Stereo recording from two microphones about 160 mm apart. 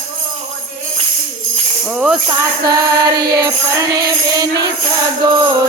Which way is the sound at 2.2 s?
25° right (ahead or behind).